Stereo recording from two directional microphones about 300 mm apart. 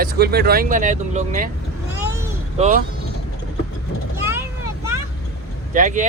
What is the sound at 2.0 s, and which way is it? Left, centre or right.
Vehicle, centre.